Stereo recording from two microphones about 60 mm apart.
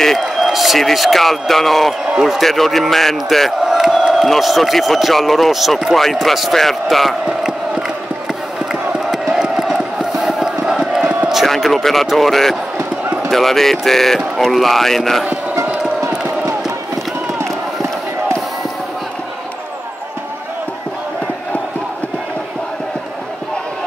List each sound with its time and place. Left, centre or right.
0.0 s a man's voice: centre
3.6 s crowd: centre
4.3 s a man's voice: centre
9.1 s crowd: centre
11.2 s a man's voice: centre
17.4 s crowd: right